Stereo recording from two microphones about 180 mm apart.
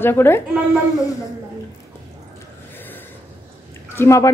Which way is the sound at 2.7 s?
10° left (ahead or behind).